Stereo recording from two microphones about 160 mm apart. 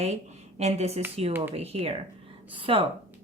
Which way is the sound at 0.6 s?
40° right (ahead or behind).